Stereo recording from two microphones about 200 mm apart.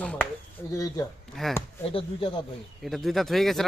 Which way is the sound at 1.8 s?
25° left (ahead or behind).